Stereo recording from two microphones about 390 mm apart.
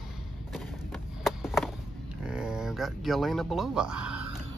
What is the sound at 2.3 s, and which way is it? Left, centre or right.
Speech, centre.